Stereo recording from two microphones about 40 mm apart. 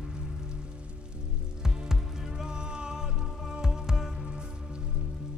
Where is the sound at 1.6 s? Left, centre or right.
Centre.